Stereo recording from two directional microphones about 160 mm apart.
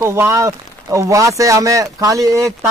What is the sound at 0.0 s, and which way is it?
Speech, 15° right (ahead or behind).